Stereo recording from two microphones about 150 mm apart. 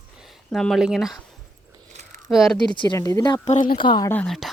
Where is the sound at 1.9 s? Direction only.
50° right (ahead or behind).